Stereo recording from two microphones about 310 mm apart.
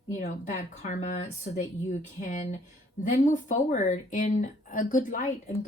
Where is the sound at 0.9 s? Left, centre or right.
Left.